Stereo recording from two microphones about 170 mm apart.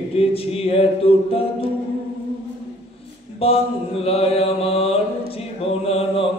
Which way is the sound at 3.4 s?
35° left (ahead or behind).